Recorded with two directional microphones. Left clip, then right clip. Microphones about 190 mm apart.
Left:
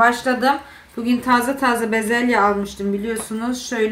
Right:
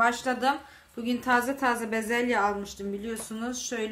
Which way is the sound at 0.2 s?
15° right (ahead or behind).